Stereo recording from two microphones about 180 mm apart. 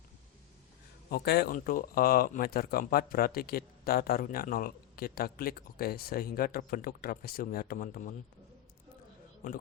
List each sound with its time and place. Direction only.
1.1 s speech: 60° left (ahead or behind)
1.5 s speech: 50° left (ahead or behind)